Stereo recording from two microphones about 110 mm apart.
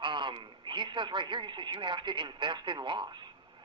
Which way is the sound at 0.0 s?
45° right (ahead or behind).